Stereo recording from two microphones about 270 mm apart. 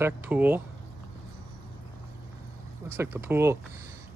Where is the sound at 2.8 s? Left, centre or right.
Centre.